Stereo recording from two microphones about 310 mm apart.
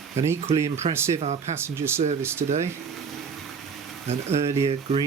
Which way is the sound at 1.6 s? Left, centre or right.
Centre.